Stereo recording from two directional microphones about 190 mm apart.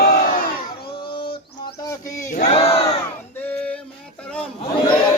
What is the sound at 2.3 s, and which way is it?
Battle cry, 35° left (ahead or behind).